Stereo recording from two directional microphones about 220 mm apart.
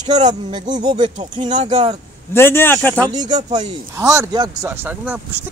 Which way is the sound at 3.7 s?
15° right (ahead or behind).